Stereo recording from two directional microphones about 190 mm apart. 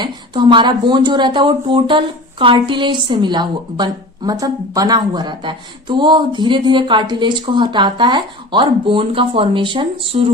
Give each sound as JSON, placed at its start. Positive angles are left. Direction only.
{"t": 0.0, "sound": "speech", "side_deg": -25}